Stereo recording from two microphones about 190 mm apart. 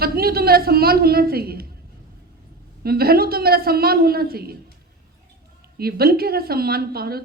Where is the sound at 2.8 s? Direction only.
55° right (ahead or behind).